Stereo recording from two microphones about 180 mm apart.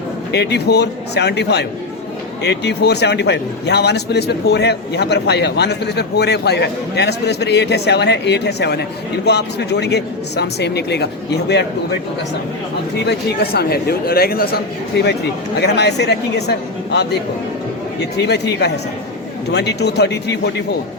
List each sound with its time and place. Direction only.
0.3 s a man's voice: 70° left (ahead or behind)
13.1 s a man's voice: 60° left (ahead or behind)
18.2 s a man's voice: 70° left (ahead or behind)